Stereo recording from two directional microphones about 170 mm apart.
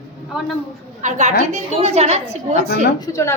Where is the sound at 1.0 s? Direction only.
45° right (ahead or behind).